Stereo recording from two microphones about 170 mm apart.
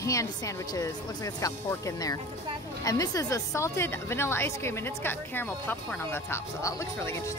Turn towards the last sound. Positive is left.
turn(degrees=15)  # may be behind; listen again after turning